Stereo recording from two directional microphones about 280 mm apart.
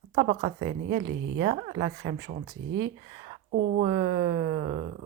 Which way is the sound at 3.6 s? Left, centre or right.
Right.